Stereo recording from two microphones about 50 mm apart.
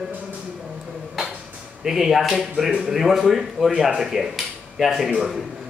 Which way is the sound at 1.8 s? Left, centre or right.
Centre.